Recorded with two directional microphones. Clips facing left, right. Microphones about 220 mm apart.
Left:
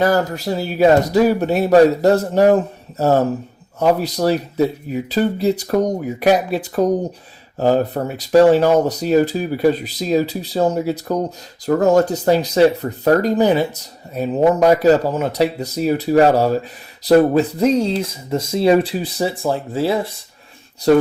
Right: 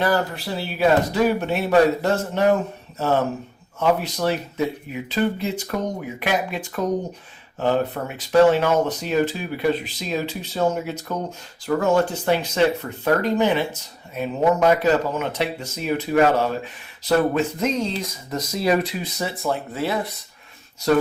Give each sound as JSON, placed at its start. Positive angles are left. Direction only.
{"t": 0.0, "sound": "speech", "side_deg": 40}